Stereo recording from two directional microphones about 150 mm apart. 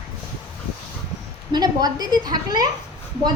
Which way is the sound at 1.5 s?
25° right (ahead or behind).